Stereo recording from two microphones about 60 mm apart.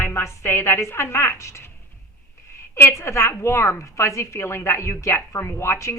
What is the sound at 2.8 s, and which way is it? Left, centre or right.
A woman's voice, left.